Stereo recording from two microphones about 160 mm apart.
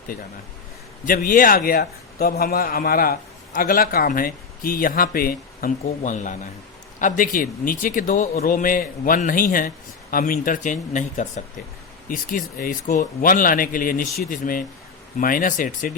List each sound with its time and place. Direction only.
1.0 s a man's voice: 60° left (ahead or behind)
6.0 s a man's voice: 50° left (ahead or behind)